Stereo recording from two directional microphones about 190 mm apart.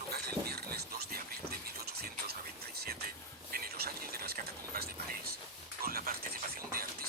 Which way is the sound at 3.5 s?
55° right (ahead or behind).